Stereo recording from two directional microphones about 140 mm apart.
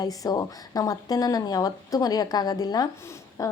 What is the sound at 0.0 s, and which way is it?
A woman's voice, 25° left (ahead or behind).